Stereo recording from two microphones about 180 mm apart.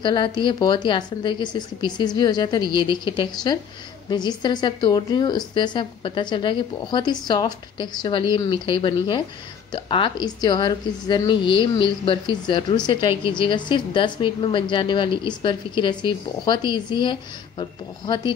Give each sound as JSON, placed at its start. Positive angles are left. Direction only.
{"t": 0.0, "sound": "a woman's voice", "side_deg": 25}